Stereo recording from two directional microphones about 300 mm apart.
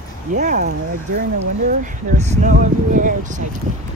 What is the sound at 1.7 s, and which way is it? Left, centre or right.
Speech, right.